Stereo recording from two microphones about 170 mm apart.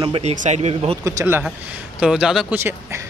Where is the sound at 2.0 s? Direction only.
5° right (ahead or behind).